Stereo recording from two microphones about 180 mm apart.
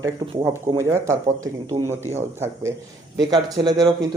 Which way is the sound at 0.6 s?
15° right (ahead or behind).